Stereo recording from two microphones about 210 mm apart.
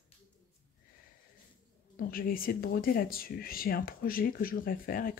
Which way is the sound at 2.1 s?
45° left (ahead or behind).